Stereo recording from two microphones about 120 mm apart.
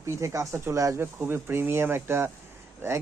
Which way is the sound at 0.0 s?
25° right (ahead or behind).